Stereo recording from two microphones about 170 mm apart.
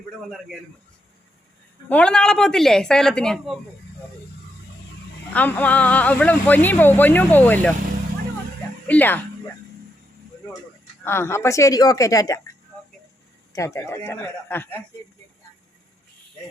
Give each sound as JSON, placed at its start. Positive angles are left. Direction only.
{"t": 1.9, "sound": "speech", "side_deg": 5}
{"t": 5.3, "sound": "speech", "side_deg": 10}
{"t": 8.9, "sound": "speech", "side_deg": 10}
{"t": 11.0, "sound": "a woman's voice", "side_deg": 15}
{"t": 13.5, "sound": "speech", "side_deg": 20}